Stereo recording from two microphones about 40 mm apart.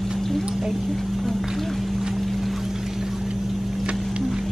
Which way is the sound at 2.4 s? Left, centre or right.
Centre.